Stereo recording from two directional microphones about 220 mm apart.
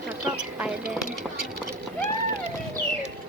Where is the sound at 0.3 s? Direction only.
5° right (ahead or behind).